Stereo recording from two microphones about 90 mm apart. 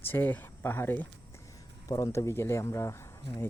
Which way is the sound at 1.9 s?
40° left (ahead or behind).